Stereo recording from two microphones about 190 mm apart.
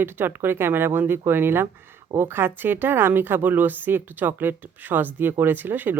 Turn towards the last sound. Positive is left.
turn(degrees=-10)  # may be behind; listen again after turning